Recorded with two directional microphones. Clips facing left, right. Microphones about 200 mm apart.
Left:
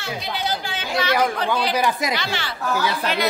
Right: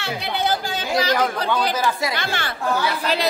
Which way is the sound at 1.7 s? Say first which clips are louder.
Left 1 dB; 15° left (ahead or behind).